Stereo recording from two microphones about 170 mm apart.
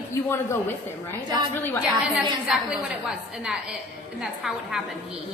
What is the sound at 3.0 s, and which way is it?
A woman's voice, 5° right (ahead or behind).